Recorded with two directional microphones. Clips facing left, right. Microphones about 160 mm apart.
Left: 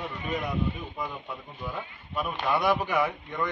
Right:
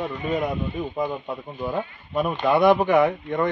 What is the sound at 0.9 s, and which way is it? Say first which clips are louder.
A man's voice: right 9 dB; 50° right (ahead or behind).